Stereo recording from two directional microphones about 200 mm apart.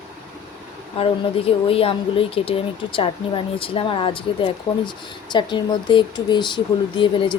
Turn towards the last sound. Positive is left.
turn(degrees=25)  # may be behind; listen again after turning